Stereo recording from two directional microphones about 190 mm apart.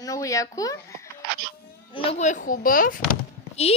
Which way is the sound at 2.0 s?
35° left (ahead or behind).